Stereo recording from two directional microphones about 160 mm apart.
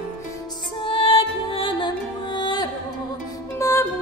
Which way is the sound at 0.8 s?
35° left (ahead or behind).